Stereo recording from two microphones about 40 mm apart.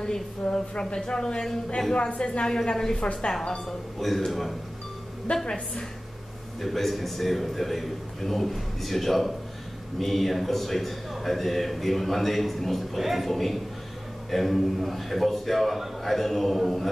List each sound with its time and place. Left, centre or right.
0.0 s a woman's voice: centre
2.0 s a woman's voice: left
4.0 s a man's voice: centre
5.3 s a woman's voice: centre
6.6 s a man's voice: centre